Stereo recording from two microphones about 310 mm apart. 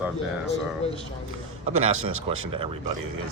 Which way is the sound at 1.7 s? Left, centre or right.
Right.